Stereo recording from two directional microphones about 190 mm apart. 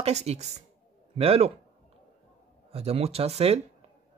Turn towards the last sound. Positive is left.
turn(degrees=-35)  # may be behind; listen again after turning